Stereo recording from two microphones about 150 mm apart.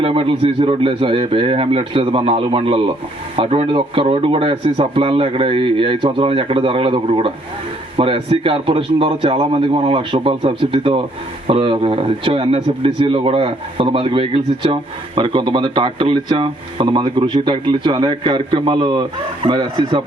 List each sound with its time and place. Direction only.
0.0 s speech: 35° right (ahead or behind)